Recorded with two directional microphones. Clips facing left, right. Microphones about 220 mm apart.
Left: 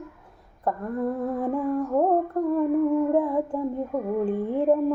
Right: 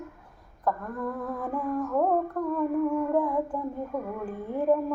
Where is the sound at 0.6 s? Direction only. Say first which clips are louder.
Left 4 dB; 25° left (ahead or behind).